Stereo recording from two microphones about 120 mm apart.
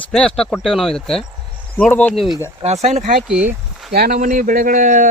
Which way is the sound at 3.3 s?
10° right (ahead or behind).